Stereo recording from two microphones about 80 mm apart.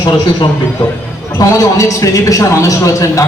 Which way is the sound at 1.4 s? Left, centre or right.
Left.